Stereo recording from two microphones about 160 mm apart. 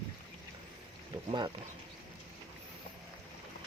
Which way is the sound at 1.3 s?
30° right (ahead or behind).